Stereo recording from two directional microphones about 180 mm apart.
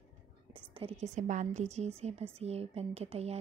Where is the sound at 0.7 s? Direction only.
35° right (ahead or behind).